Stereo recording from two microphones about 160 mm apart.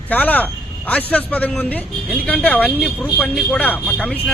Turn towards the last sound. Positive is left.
turn(degrees=10)  # may be behind; listen again after turning